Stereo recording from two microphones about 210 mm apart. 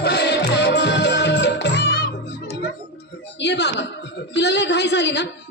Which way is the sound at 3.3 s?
55° left (ahead or behind).